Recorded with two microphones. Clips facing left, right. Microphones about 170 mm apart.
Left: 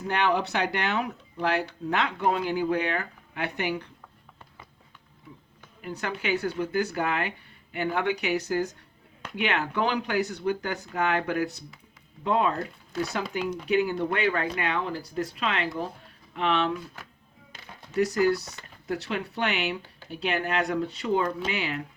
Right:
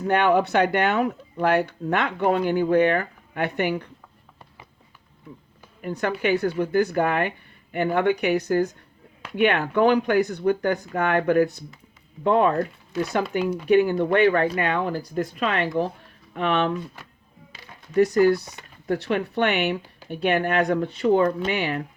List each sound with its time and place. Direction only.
0.1 s speech: 50° right (ahead or behind)
5.8 s speech: 55° right (ahead or behind)
13.7 s speech: 55° right (ahead or behind)
17.9 s speech: 55° right (ahead or behind)